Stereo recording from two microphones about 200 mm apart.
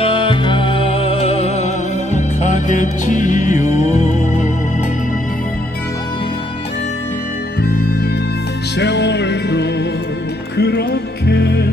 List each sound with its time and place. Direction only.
0.0 s music: 25° left (ahead or behind)
8.7 s music: 60° left (ahead or behind)